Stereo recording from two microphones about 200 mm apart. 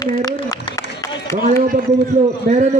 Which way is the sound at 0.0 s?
20° left (ahead or behind).